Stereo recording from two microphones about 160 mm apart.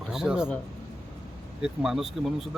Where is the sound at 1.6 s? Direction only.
5° right (ahead or behind).